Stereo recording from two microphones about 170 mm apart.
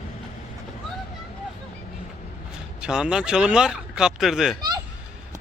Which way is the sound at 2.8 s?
5° right (ahead or behind).